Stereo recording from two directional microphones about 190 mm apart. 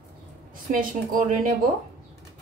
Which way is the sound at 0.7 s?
45° right (ahead or behind).